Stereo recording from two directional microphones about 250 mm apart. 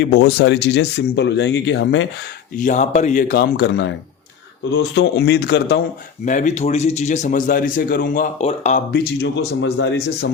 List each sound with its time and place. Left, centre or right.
0.0 s speech: left
2.6 s speech: left
6.2 s speech: left
9.2 s speech: left